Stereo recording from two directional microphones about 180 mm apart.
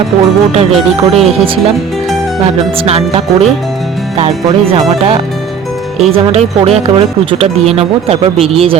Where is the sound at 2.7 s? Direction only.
35° right (ahead or behind).